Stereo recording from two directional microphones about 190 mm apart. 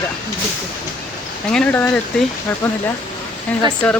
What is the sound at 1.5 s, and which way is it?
Speech, 5° left (ahead or behind).